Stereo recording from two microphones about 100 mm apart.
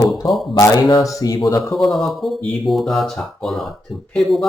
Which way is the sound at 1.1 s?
35° left (ahead or behind).